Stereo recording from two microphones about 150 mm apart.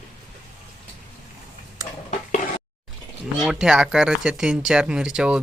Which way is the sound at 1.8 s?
25° right (ahead or behind).